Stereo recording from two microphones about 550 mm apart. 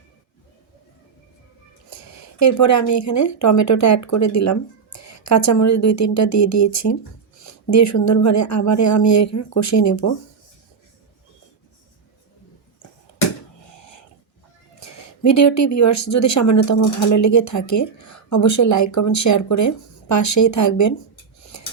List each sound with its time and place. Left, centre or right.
1.9 s speech: left
14.8 s speech: left
21.5 s filing: left